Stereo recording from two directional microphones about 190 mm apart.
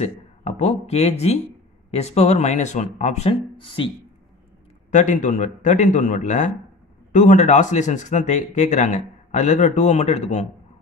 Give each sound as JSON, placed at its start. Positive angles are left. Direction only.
{"t": 0.0, "sound": "speech", "side_deg": 35}
{"t": 4.9, "sound": "speech", "side_deg": 40}